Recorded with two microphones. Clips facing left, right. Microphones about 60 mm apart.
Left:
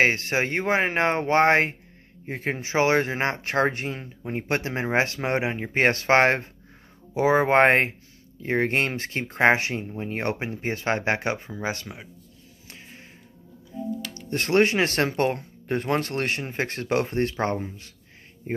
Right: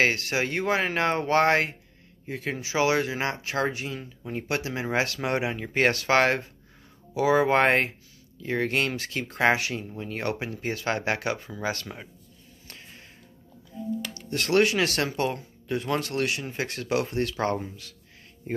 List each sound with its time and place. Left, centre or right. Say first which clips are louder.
0.0 s speech: left 2 dB; left
12.6 s music: left 2 dB; centre
14.3 s speech: left 2 dB; left